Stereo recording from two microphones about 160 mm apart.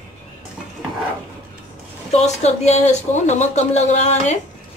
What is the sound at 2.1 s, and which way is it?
Speech, 45° left (ahead or behind).